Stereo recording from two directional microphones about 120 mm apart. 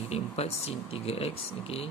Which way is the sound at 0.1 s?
60° left (ahead or behind).